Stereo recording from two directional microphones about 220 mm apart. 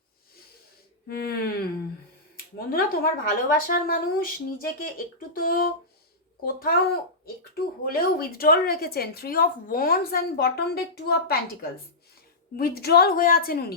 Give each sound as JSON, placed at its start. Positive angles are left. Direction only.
{"t": 1.0, "sound": "a woman's voice", "side_deg": 45}
{"t": 12.5, "sound": "a woman's voice", "side_deg": 45}